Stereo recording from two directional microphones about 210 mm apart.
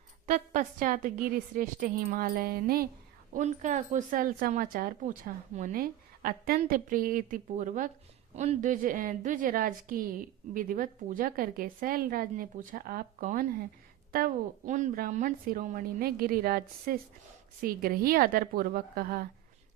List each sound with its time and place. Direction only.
0.3 s a woman's voice: 40° right (ahead or behind)